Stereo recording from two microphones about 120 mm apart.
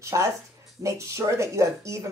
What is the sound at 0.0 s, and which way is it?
Speech, 25° right (ahead or behind).